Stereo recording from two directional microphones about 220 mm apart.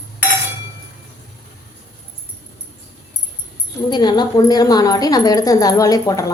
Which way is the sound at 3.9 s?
20° left (ahead or behind).